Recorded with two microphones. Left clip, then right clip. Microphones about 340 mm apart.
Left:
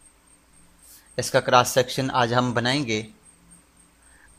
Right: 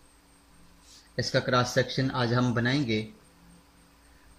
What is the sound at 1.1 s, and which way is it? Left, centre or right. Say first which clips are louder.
Speech: left 8 dB; centre.